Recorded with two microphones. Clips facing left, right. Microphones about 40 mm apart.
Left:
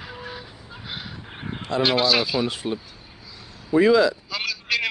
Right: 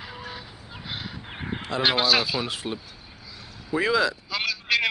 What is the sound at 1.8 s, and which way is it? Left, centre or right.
Speech, centre.